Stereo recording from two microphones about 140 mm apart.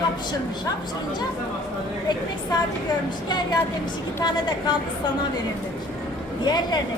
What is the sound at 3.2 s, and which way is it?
Speech, 30° left (ahead or behind).